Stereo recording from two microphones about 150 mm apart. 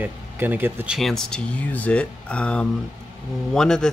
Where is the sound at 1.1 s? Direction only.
5° left (ahead or behind).